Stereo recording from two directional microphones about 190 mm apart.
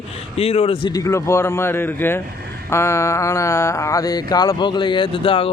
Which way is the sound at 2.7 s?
15° left (ahead or behind).